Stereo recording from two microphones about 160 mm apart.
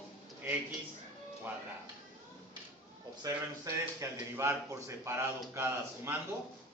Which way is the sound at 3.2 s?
15° right (ahead or behind).